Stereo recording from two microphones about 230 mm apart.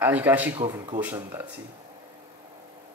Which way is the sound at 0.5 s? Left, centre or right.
Centre.